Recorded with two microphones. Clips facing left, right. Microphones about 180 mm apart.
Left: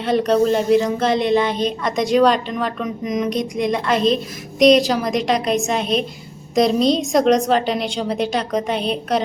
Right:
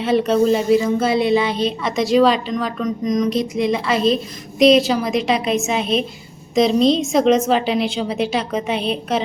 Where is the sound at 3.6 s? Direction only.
5° right (ahead or behind).